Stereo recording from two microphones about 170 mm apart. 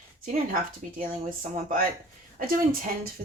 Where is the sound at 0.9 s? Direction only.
55° right (ahead or behind).